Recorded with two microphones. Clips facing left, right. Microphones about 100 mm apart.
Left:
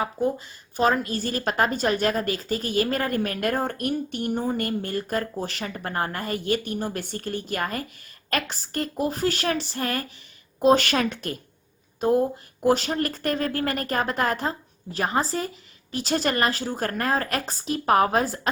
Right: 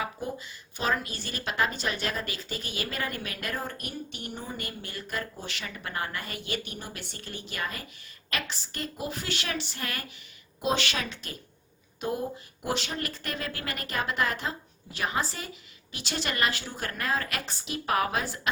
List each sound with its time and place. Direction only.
0.0 s a woman's voice: 40° left (ahead or behind)
12.6 s a woman's voice: 40° left (ahead or behind)